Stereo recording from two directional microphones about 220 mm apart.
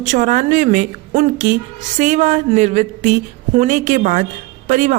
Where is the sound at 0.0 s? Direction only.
35° right (ahead or behind).